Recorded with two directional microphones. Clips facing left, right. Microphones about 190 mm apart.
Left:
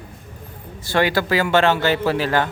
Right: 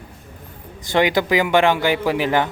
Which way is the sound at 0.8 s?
20° right (ahead or behind).